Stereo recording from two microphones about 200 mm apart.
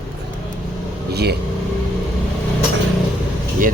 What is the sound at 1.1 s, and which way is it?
Speech, 55° right (ahead or behind).